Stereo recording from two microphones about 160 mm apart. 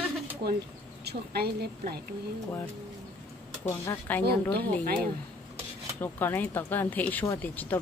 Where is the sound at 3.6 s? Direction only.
15° left (ahead or behind).